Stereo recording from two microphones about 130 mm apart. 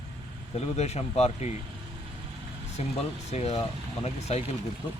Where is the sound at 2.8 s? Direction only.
55° left (ahead or behind).